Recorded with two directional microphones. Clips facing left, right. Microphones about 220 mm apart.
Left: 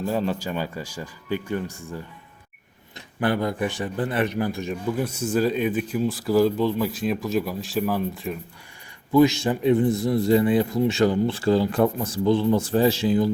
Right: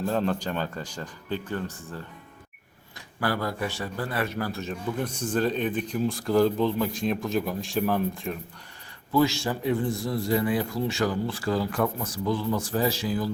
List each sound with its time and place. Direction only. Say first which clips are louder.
0.1 s a man's voice: left 2 dB; 5° left (ahead or behind)
3.2 s a man's voice: left 5 dB; 20° left (ahead or behind); by 8.4 s centre (ahead or behind)
9.1 s a man's voice: left 6 dB; 20° left (ahead or behind)